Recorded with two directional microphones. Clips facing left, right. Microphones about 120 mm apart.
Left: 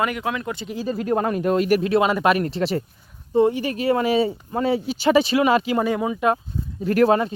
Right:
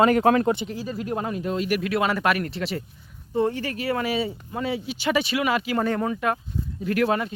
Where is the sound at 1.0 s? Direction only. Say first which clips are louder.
Left 8 dB; 55° left (ahead or behind).